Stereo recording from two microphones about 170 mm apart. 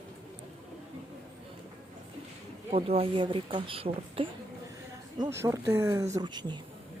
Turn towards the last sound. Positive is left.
turn(degrees=-25)  # may be behind; listen again after turning